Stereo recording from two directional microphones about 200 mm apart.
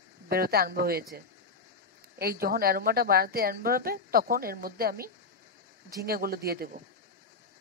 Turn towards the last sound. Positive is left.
turn(degrees=-50)  # may be behind; listen again after turning